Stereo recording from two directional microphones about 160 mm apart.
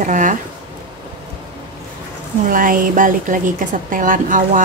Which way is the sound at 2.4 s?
60° right (ahead or behind).